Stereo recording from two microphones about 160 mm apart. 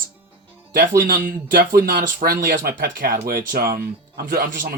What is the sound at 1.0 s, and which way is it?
Speech, 60° right (ahead or behind).